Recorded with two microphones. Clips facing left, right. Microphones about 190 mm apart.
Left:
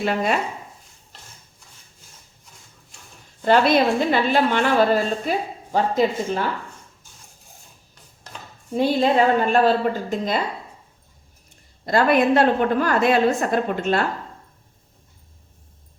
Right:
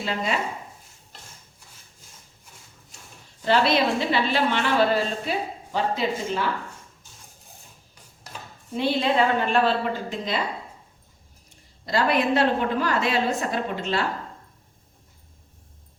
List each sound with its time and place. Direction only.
0.0 s speech: 60° left (ahead or behind)
3.4 s a woman's voice: 50° left (ahead or behind)
8.7 s a woman's voice: 40° left (ahead or behind)
11.9 s a woman's voice: 50° left (ahead or behind)